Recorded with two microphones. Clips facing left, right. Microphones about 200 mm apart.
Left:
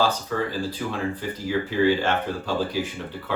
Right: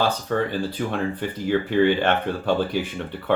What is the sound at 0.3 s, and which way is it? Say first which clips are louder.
Speech: right 3 dB; 60° right (ahead or behind).